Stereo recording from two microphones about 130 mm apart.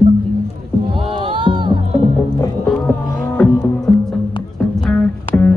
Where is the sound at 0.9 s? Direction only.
40° right (ahead or behind).